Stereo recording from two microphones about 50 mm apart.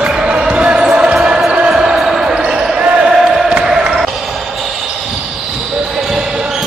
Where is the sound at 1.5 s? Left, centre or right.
Centre.